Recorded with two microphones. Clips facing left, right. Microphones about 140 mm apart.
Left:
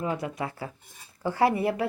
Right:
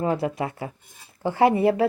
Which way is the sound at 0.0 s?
30° right (ahead or behind).